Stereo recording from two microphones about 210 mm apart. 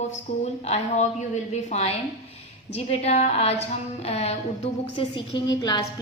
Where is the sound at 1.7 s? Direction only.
30° left (ahead or behind).